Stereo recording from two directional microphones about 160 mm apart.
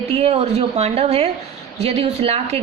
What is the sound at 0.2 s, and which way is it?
A woman's voice, 40° right (ahead or behind).